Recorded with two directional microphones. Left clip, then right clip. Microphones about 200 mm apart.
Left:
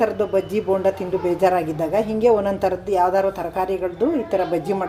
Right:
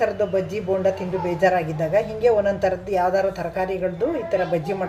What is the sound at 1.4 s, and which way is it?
A woman's voice, 35° left (ahead or behind).